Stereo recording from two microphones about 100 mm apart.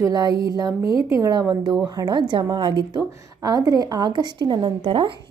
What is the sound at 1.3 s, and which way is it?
A woman's voice, 45° right (ahead or behind).